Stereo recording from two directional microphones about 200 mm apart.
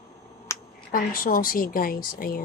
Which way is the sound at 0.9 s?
45° left (ahead or behind).